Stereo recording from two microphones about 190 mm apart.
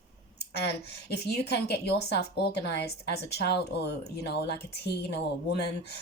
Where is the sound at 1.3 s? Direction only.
60° left (ahead or behind).